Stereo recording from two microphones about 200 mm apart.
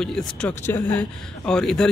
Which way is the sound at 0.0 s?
5° left (ahead or behind).